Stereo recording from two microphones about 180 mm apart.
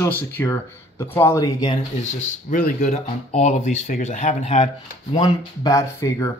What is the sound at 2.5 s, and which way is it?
Speech, 45° left (ahead or behind).